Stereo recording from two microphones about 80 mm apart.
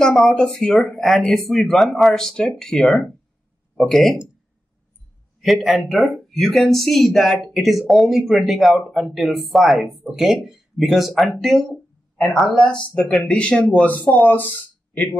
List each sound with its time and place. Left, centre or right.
0.0 s speech: centre
5.4 s speech: centre; by 14.5 s left